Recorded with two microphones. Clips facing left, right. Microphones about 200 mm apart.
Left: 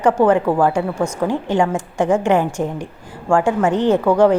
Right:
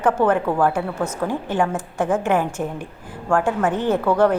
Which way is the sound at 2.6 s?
20° left (ahead or behind).